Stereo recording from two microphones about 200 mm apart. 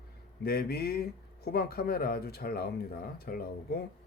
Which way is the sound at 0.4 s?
50° left (ahead or behind).